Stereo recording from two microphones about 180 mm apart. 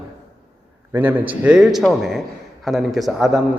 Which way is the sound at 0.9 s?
10° right (ahead or behind).